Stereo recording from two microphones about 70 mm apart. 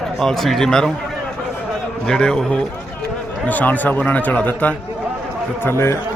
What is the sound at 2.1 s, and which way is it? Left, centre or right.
Speech, centre.